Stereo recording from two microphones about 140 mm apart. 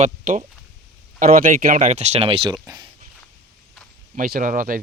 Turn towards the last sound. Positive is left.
turn(degrees=-75)  # may be behind; listen again after turning